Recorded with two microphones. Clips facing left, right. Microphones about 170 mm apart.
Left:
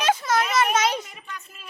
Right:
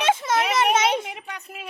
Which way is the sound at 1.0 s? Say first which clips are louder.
Right 5 dB; 65° right (ahead or behind).